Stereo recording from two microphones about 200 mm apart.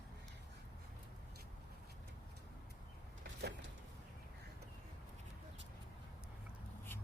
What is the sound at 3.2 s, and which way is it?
Power windows, 60° right (ahead or behind).